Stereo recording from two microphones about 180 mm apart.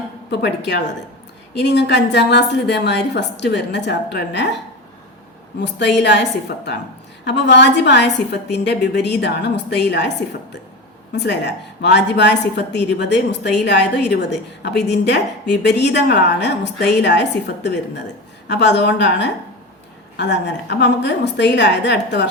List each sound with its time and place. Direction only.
0.3 s a woman's voice: 70° left (ahead or behind)
5.5 s a woman's voice: 75° left (ahead or behind)
7.3 s a woman's voice: 75° left (ahead or behind)
11.1 s a woman's voice: 75° left (ahead or behind)